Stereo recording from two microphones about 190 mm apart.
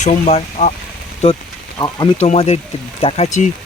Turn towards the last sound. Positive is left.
turn(degrees=35)  # may be behind; listen again after turning